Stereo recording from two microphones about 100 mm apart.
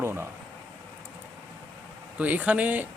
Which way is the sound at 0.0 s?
25° right (ahead or behind).